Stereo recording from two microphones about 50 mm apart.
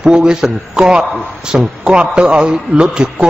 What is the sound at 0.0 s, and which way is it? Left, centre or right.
A man's voice, centre.